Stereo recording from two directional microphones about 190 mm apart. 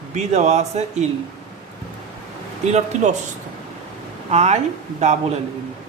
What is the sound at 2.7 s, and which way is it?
Speech, 35° right (ahead or behind).